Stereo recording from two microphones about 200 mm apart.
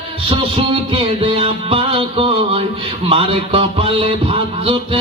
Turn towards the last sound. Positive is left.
turn(degrees=-30)  # may be behind; listen again after turning